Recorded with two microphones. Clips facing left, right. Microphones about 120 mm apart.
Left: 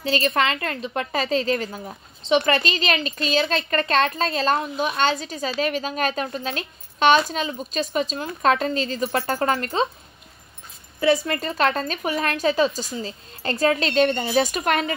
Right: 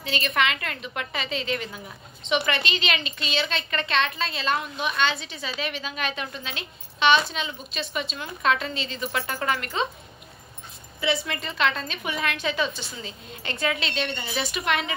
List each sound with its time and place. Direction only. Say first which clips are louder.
0.0 s a woman's voice: left 4 dB; 35° left (ahead or behind)
11.0 s a woman's voice: left 7 dB; 40° left (ahead or behind)